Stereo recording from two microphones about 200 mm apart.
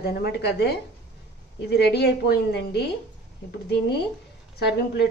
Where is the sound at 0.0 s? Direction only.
50° left (ahead or behind).